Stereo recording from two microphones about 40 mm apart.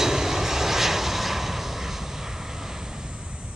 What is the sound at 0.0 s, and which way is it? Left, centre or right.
Vehicle, centre.